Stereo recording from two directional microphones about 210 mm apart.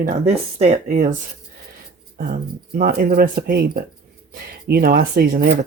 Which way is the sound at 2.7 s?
45° right (ahead or behind).